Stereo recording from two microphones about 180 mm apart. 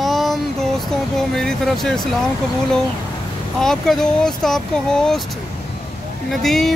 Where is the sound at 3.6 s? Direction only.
5° left (ahead or behind).